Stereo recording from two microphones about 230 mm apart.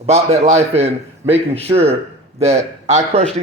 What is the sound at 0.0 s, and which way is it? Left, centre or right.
A man's voice, right.